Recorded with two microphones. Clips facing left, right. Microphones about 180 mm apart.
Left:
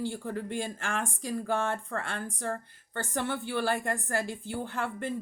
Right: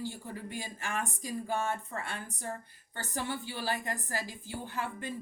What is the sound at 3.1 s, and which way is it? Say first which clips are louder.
Speech: left 5 dB; 60° left (ahead or behind).